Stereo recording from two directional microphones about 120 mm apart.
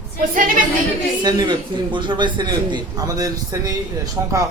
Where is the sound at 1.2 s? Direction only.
40° right (ahead or behind).